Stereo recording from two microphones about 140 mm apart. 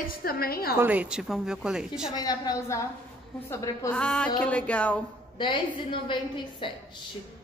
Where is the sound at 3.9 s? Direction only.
5° left (ahead or behind).